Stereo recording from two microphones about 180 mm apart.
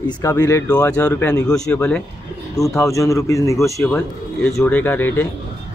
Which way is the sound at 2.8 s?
15° left (ahead or behind).